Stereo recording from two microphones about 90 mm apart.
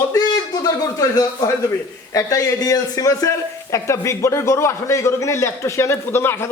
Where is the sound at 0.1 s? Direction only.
45° left (ahead or behind).